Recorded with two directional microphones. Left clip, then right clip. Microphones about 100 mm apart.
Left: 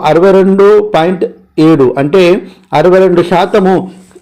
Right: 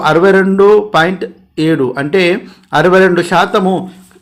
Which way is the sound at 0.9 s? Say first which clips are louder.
Left 2 dB; 25° left (ahead or behind).